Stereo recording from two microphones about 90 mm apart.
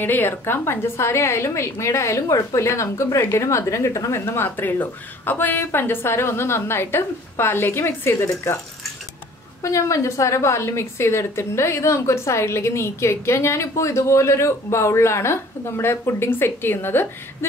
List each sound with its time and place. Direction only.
0.0 s a woman's voice: 25° left (ahead or behind)
9.6 s a woman's voice: 35° left (ahead or behind)